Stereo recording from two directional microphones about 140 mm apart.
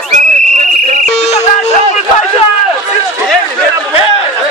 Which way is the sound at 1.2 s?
50° left (ahead or behind).